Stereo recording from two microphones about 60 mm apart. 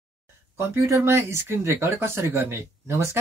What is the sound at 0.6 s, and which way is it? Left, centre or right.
Speech, right.